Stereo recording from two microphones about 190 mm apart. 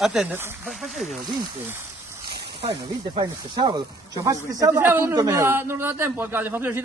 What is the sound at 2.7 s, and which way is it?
A man's voice, 25° right (ahead or behind).